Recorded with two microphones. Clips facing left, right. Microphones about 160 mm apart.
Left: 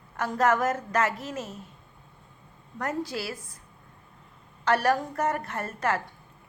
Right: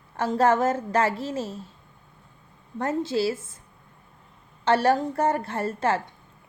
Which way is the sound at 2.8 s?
25° right (ahead or behind).